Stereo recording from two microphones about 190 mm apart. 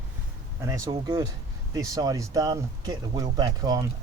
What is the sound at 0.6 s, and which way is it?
Speech, 20° right (ahead or behind).